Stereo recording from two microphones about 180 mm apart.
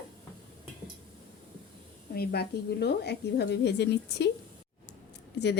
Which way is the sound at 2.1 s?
65° left (ahead or behind).